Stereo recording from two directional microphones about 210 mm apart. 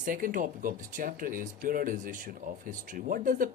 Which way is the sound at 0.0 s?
40° right (ahead or behind).